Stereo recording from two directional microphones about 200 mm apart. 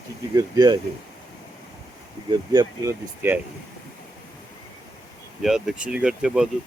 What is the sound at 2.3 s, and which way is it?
Speech, 20° right (ahead or behind).